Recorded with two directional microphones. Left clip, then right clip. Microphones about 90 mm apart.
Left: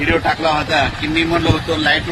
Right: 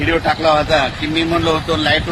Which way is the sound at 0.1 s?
35° right (ahead or behind).